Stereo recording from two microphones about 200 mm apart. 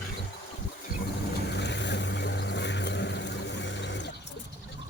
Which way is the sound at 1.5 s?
60° left (ahead or behind).